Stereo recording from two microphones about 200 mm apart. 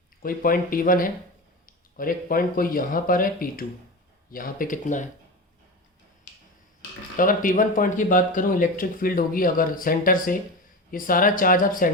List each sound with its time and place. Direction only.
0.2 s speech: 45° left (ahead or behind)
7.2 s speech: 45° left (ahead or behind)